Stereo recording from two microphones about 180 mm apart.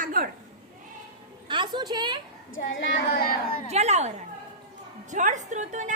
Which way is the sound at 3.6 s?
35° right (ahead or behind).